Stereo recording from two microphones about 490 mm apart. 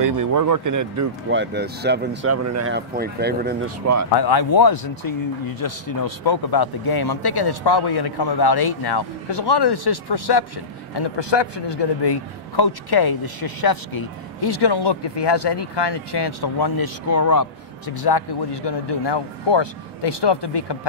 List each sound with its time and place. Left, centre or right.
0.0 s speech: right
1.3 s speech: right
3.8 s speech: right
4.1 s speech: left